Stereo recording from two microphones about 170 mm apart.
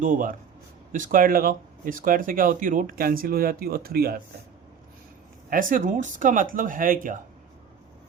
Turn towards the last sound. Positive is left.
turn(degrees=-55)  # may be behind; listen again after turning